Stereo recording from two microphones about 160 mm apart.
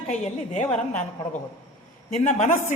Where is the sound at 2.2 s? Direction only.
45° left (ahead or behind).